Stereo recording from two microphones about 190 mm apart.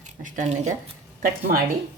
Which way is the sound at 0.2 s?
40° right (ahead or behind).